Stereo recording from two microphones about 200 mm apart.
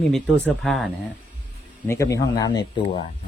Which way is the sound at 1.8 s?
15° left (ahead or behind).